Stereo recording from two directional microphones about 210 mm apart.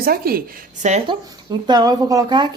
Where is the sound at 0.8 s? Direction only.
30° right (ahead or behind).